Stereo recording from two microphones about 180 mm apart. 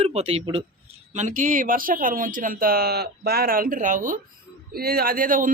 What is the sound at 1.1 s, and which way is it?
Speech, 45° right (ahead or behind).